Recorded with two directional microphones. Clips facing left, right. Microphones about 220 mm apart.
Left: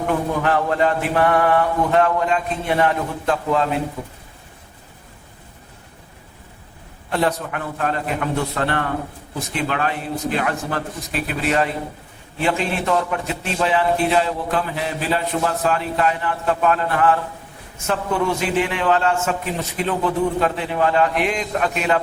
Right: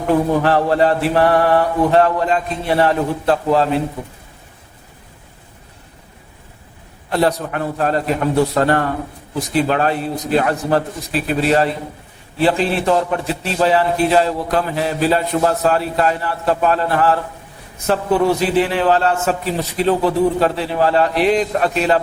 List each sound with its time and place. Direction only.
0.4 s a man's voice: 35° right (ahead or behind)
7.1 s a man's voice: 35° right (ahead or behind)